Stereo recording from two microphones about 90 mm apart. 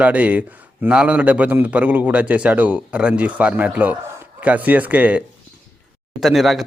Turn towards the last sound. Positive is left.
turn(degrees=0)  # may be behind; listen again after turning